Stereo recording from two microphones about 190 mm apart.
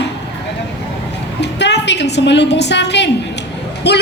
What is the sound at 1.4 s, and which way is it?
A woman's voice, 65° left (ahead or behind).